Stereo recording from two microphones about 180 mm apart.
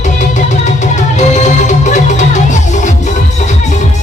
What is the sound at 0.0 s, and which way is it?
Music, 40° left (ahead or behind).